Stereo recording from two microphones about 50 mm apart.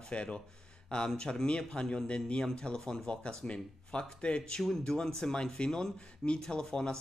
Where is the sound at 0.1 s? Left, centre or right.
Left.